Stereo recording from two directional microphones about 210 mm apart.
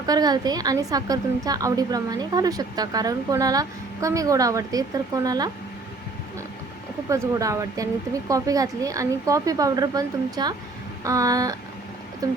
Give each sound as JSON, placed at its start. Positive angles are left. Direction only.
{"t": 0.0, "sound": "a woman's voice", "side_deg": -20}
{"t": 7.1, "sound": "a woman's voice", "side_deg": -15}